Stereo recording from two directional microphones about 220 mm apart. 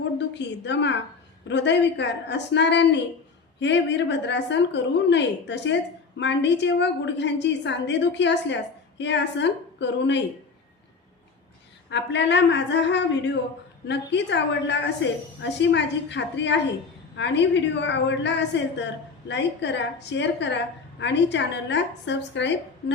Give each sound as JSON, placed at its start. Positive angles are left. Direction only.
{"t": 0.2, "sound": "a woman's voice", "side_deg": 50}
{"t": 11.9, "sound": "a woman's voice", "side_deg": 50}